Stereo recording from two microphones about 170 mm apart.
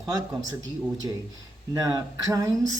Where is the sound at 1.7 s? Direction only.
20° right (ahead or behind).